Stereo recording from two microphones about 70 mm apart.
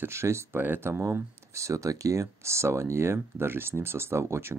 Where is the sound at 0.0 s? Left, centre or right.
Right.